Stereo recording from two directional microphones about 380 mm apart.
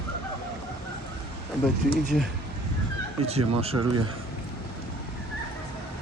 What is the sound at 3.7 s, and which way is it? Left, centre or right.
Speech, right.